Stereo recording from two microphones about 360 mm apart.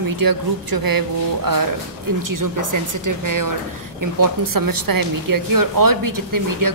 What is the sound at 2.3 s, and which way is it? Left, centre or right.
Speech, right.